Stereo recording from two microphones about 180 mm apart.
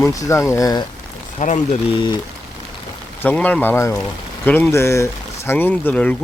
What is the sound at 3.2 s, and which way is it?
Speech, 10° left (ahead or behind).